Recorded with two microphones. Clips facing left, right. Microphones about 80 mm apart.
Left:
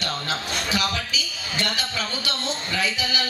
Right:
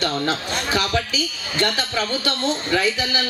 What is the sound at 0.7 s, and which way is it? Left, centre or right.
Speech, right.